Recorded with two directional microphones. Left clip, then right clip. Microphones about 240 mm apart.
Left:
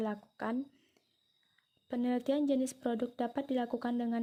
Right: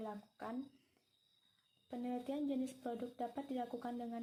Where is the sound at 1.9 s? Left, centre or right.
Left.